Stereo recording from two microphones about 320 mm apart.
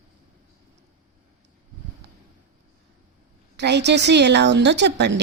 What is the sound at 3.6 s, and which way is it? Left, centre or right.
Speech, right.